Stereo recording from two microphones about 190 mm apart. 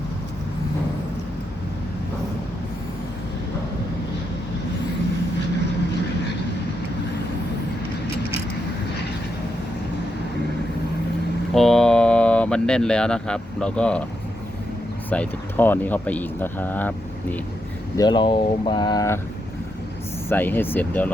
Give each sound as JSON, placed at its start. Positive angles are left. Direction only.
{"t": 11.5, "sound": "a sound", "side_deg": 5}
{"t": 15.1, "sound": "speech", "side_deg": 10}
{"t": 17.9, "sound": "speech", "side_deg": 20}
{"t": 20.3, "sound": "speech", "side_deg": 10}